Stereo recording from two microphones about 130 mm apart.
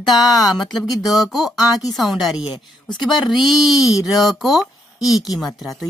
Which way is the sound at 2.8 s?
35° left (ahead or behind).